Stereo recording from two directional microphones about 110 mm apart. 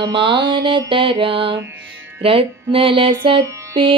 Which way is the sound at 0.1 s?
50° right (ahead or behind).